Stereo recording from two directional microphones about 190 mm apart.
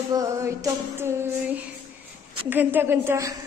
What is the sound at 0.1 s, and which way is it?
Female singing, 15° right (ahead or behind).